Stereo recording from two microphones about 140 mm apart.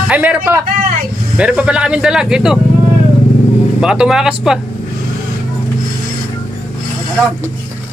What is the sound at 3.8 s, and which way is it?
Speech, 5° right (ahead or behind).